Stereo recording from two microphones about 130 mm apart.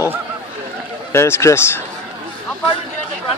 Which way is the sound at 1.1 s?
20° left (ahead or behind).